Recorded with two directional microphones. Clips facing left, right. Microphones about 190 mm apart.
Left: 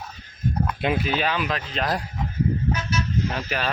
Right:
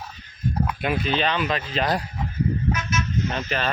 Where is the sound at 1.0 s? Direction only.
5° left (ahead or behind).